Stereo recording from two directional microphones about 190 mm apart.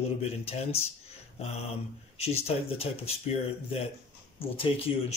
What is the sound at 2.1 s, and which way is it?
Speech, 30° left (ahead or behind).